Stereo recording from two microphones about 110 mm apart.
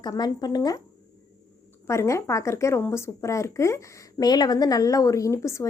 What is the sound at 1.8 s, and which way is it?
Speech, 25° left (ahead or behind).